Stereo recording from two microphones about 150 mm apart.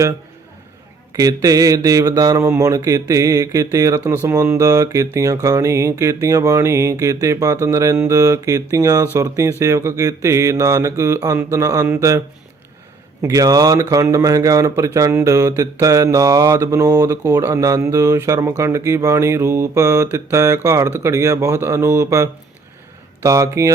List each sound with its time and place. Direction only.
1.1 s speech: 25° right (ahead or behind)
13.2 s speech: 25° right (ahead or behind)